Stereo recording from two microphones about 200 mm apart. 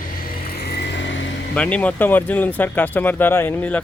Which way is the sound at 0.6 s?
55° left (ahead or behind).